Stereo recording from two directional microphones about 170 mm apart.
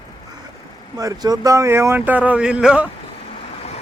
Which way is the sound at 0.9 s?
20° right (ahead or behind).